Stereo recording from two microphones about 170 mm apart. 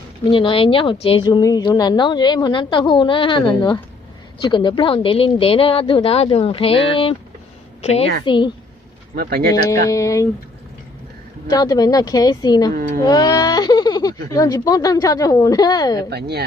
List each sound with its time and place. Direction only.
0.3 s a woman's voice: 30° left (ahead or behind)
8.2 s a woman's voice: 25° left (ahead or behind)
9.1 s speech: 60° right (ahead or behind)
9.5 s speech: 20° left (ahead or behind)
11.4 s a woman's voice: 20° left (ahead or behind)
13.1 s baby cry: 20° left (ahead or behind)
14.3 s a woman's voice: 20° left (ahead or behind)
16.0 s speech: 75° right (ahead or behind)